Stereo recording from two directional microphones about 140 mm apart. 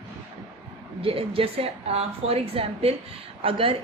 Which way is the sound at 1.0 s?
40° right (ahead or behind).